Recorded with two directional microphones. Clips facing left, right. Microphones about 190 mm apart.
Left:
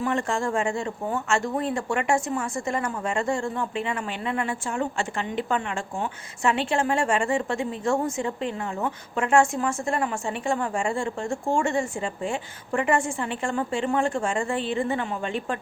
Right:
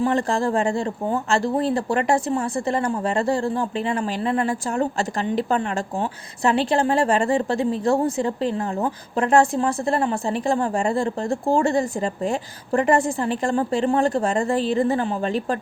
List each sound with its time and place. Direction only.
0.0 s speech: 35° right (ahead or behind)